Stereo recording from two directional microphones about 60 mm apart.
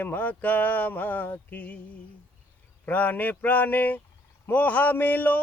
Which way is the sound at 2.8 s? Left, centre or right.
Left.